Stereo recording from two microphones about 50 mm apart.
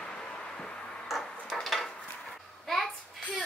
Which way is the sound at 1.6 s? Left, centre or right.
Centre.